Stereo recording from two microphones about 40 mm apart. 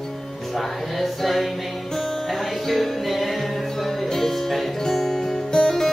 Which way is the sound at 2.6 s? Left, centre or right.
Centre.